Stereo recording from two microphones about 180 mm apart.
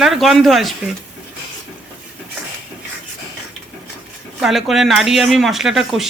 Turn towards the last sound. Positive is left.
turn(degrees=0)  # may be behind; listen again after turning